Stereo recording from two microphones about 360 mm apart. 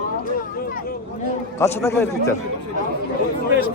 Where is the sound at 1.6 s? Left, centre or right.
Centre.